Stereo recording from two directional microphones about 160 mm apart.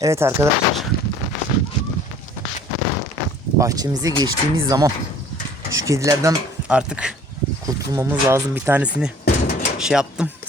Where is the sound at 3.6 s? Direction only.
20° right (ahead or behind).